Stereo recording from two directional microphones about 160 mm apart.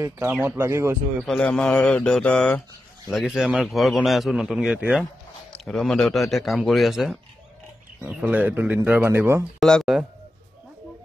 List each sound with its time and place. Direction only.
0.0 s speech: 15° right (ahead or behind)
1.2 s a man's voice: 5° left (ahead or behind); by 9.5 s 15° right (ahead or behind)
9.6 s a man's voice: 5° left (ahead or behind)